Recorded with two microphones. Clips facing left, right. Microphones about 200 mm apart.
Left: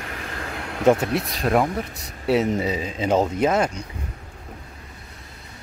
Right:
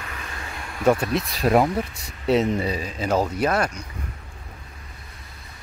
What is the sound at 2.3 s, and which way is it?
Speech, 15° left (ahead or behind).